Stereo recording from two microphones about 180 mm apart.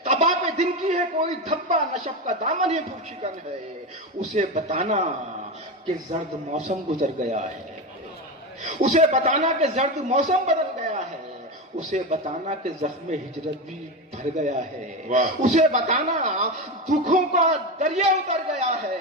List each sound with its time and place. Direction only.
0.0 s a man's voice: 35° right (ahead or behind)
4.4 s a man's voice: 40° right (ahead or behind)
6.1 s a man's voice: 40° right (ahead or behind)
8.6 s a man's voice: 40° right (ahead or behind)
14.3 s a man's voice: 40° right (ahead or behind)